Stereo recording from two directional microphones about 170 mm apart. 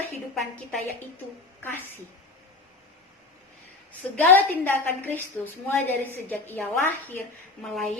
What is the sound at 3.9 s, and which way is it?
A woman's voice, 10° left (ahead or behind).